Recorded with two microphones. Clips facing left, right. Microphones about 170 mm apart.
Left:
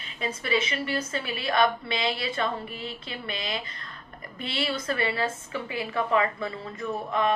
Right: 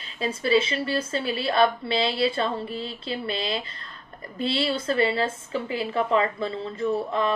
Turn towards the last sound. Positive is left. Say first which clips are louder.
# right 2 dB
turn(degrees=-30)  # may be behind; listen again after turning